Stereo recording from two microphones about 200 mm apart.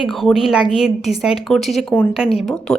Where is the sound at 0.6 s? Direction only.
30° left (ahead or behind).